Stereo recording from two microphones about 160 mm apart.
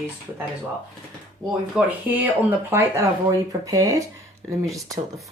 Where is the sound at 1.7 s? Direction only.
10° right (ahead or behind).